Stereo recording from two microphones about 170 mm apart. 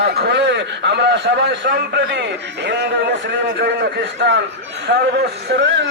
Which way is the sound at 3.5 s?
80° right.